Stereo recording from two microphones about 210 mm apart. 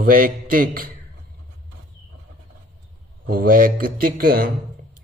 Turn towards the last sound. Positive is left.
turn(degrees=-45)  # may be behind; listen again after turning